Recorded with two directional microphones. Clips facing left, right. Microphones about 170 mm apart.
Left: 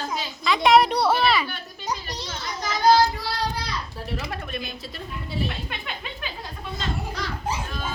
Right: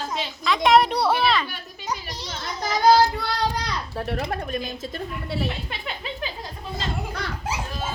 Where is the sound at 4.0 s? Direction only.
55° right (ahead or behind).